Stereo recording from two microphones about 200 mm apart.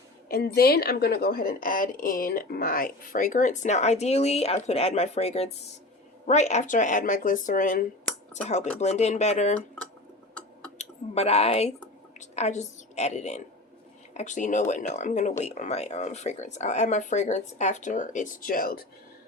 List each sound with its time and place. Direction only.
0.3 s speech: 50° left (ahead or behind); by 9.6 s 35° left (ahead or behind)
10.8 s a woman's voice: 30° left (ahead or behind)